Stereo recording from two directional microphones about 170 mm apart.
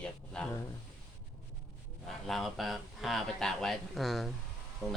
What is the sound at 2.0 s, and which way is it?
A man's voice, centre (ahead or behind).